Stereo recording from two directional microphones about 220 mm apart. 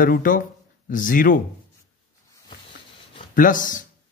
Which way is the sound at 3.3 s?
35° left (ahead or behind).